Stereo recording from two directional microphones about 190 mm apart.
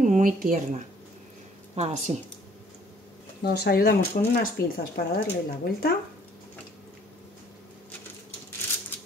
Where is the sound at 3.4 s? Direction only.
60° left (ahead or behind).